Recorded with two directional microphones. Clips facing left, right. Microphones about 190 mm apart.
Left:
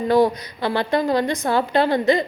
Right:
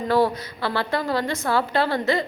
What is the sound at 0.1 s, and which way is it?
A woman's voice, 15° left (ahead or behind).